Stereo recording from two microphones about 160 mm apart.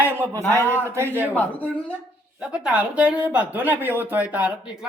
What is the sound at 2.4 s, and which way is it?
Speech, 5° right (ahead or behind).